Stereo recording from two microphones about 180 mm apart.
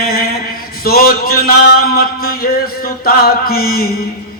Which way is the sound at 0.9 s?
55° left (ahead or behind).